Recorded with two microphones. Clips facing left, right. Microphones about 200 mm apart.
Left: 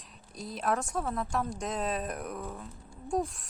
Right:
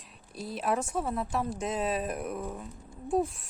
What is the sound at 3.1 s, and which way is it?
Speech, 5° right (ahead or behind).